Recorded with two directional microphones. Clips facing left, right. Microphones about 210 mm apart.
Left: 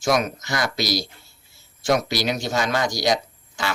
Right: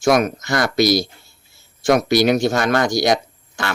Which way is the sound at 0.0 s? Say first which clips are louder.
Right 5 dB; 55° right (ahead or behind).